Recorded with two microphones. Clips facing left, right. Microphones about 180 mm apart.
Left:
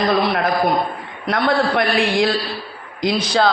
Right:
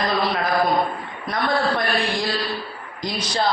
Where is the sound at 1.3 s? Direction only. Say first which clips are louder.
Left 4 dB; 70° left (ahead or behind).